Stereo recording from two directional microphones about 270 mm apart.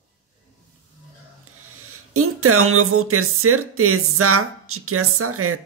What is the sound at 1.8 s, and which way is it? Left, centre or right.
A woman's voice, right.